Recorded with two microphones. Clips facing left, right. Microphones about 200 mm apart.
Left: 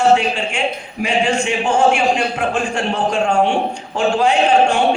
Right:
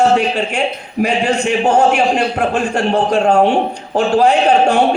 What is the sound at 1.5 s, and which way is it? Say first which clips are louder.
A man's voice: right 5 dB; 40° right (ahead or behind).